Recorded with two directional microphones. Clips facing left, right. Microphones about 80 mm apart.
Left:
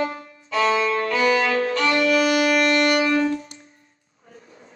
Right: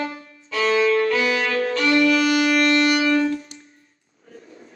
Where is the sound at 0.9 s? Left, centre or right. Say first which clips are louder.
Right 4 dB; left.